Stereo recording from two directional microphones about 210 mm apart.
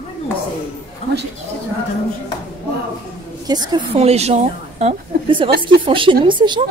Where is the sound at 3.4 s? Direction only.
20° right (ahead or behind).